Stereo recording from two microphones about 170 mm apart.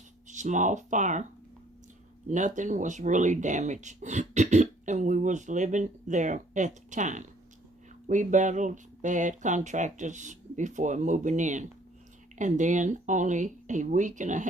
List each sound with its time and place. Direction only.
0.3 s speech: 45° right (ahead or behind)
2.3 s speech: 45° right (ahead or behind)